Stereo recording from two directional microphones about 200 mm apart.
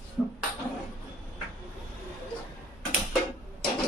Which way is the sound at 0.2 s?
Centre (ahead or behind).